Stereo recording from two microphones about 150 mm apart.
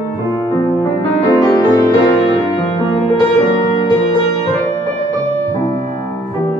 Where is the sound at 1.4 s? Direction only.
25° left (ahead or behind).